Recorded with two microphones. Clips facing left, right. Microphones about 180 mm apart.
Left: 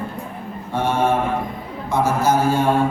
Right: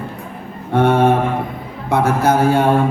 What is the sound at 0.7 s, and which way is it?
Mantra, 60° right (ahead or behind).